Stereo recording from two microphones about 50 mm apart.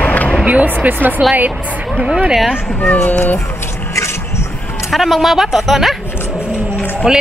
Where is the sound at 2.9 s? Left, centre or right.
Left.